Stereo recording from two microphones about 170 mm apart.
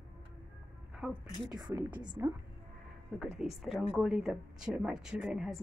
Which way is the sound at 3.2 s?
Centre (ahead or behind).